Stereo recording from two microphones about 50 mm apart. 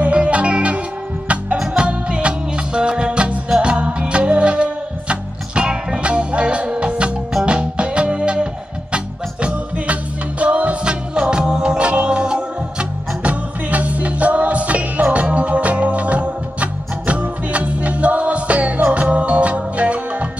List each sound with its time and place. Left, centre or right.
0.0 s music: right
1.8 s music: right